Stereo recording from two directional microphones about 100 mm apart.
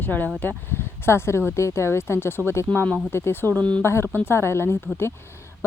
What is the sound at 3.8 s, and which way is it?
Speech, 25° left (ahead or behind).